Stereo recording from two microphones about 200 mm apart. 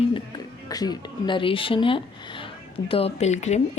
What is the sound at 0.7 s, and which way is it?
A woman's voice, 20° left (ahead or behind).